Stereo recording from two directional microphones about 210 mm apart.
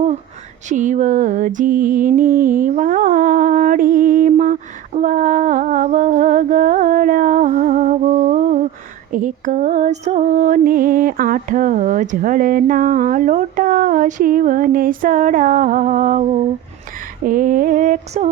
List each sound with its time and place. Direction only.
0.7 s music: 35° right (ahead or behind)
17.2 s music: 40° right (ahead or behind)